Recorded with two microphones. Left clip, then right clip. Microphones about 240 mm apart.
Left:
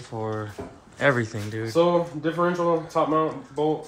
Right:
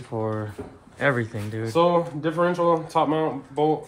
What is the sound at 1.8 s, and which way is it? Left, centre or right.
Speech, right.